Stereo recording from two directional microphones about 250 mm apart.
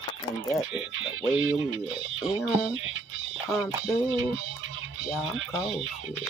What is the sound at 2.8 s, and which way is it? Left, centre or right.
Music, right.